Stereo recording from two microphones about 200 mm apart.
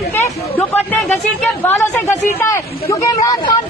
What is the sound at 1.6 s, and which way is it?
Speech, 10° left (ahead or behind).